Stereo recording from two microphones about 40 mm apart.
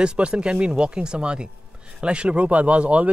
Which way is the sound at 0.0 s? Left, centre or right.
Right.